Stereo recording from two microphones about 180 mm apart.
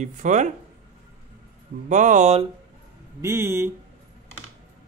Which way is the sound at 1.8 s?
45° right (ahead or behind).